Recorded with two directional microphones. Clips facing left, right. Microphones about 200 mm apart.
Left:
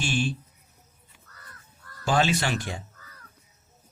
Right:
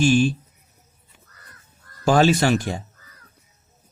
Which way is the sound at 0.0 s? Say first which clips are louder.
Right 10 dB; 45° right (ahead or behind).